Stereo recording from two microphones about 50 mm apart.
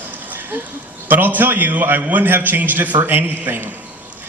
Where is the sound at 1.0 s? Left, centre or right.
Right.